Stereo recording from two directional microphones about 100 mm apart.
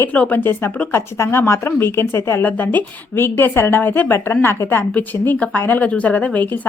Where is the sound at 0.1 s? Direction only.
15° left (ahead or behind).